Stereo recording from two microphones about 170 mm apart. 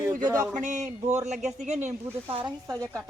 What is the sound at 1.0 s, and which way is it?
Speech, 40° right (ahead or behind).